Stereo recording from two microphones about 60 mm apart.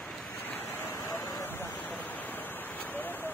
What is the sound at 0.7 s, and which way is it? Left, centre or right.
Vehicle, left.